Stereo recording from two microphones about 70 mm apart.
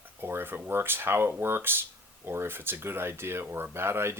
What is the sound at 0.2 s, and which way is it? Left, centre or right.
Speech, right.